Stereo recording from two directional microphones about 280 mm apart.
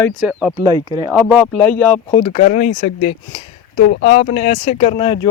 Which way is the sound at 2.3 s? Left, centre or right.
Left.